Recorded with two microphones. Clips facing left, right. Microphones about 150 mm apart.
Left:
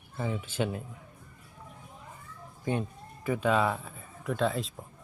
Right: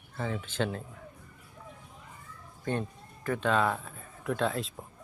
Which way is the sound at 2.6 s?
10° left (ahead or behind).